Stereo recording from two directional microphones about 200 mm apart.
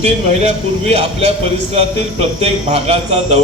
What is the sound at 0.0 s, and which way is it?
A man's voice, 30° right (ahead or behind).